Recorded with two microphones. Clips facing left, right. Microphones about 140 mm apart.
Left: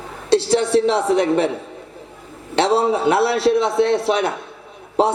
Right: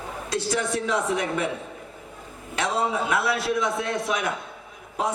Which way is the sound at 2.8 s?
30° left (ahead or behind).